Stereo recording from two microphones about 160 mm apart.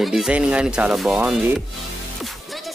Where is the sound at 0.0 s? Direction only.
Centre (ahead or behind).